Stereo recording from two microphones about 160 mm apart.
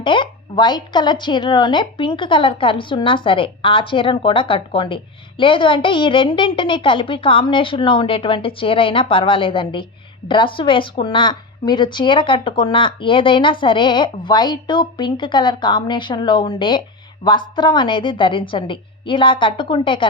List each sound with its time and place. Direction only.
0.0 s a woman's voice: 30° left (ahead or behind)